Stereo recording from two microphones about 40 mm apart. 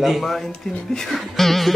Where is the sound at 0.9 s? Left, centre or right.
Centre.